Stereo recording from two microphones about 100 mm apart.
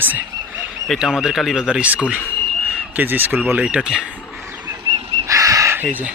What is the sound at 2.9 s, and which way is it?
Speech, 20° right (ahead or behind).